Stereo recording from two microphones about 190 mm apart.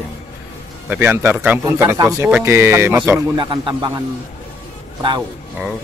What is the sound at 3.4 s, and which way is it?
Speech, 25° right (ahead or behind).